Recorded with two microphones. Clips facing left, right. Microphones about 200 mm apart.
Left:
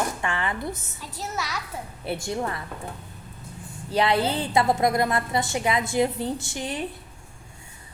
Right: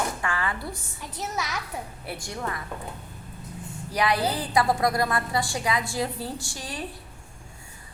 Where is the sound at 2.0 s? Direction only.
25° left (ahead or behind).